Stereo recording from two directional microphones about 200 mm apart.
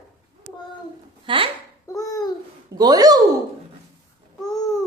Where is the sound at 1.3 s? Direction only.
25° right (ahead or behind).